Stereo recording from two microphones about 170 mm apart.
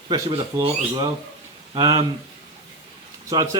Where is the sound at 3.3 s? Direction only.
20° right (ahead or behind).